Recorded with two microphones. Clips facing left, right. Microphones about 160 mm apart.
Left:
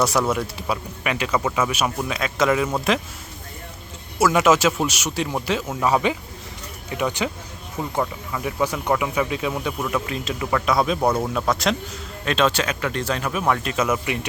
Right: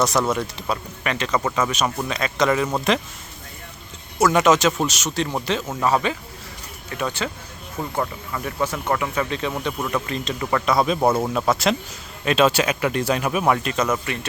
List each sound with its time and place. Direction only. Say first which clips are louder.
0.0 s speech: even; 10° left (ahead or behind)
4.2 s speech: even; 5° left (ahead or behind)
9.6 s speech: even; centre (ahead or behind)
13.6 s speech: even; centre (ahead or behind)